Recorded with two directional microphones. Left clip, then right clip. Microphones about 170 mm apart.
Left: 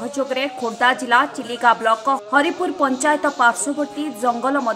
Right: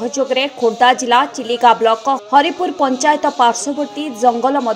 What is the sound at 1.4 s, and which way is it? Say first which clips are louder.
Speech: right 5 dB; 20° right (ahead or behind).